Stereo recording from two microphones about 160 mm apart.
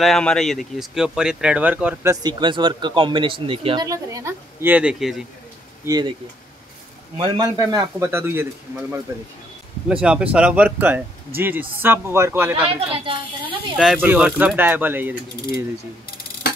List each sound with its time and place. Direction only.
0.0 s speech: 5° left (ahead or behind)
2.2 s speech: 30° right (ahead or behind)
3.8 s mechanisms: 20° right (ahead or behind); by 5.2 s centre (ahead or behind)
5.9 s speech: 25° right (ahead or behind)
7.2 s speech: 30° right (ahead or behind)
7.4 s mechanisms: 20° right (ahead or behind)
9.8 s mechanisms: 5° right (ahead or behind)
12.6 s speech: 35° right (ahead or behind)
13.7 s mechanisms: 5° right (ahead or behind)